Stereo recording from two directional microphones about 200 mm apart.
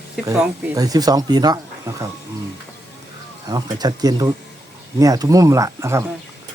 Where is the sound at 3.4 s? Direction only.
20° right (ahead or behind).